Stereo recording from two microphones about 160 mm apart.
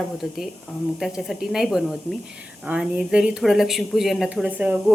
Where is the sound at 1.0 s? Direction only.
Centre (ahead or behind).